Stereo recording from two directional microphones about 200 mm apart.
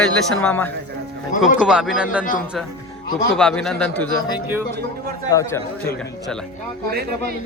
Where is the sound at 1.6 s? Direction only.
5° right (ahead or behind).